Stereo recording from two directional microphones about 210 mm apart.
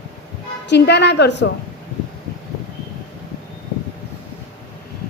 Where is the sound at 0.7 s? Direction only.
55° left (ahead or behind).